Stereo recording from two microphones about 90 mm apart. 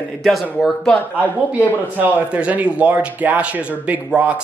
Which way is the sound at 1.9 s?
15° right (ahead or behind).